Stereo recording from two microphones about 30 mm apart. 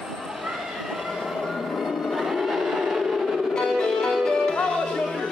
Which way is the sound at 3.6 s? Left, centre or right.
Left.